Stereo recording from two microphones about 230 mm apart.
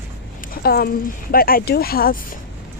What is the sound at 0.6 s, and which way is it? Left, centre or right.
Speech, left.